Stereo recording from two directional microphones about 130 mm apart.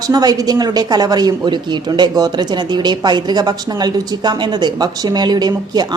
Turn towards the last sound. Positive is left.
turn(degrees=-30)  # may be behind; listen again after turning